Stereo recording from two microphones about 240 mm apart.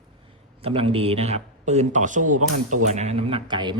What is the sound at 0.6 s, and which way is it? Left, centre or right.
A man's voice, right.